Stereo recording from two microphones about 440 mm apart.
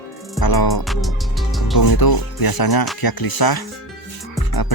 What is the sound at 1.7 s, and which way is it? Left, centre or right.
Speech, left.